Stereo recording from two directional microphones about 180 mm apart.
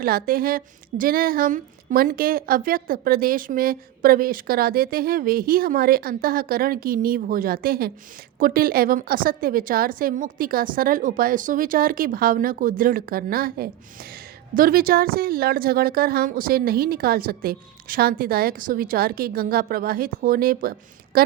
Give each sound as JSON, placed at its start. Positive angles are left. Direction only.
{"t": 0.0, "sound": "a woman's voice", "side_deg": -55}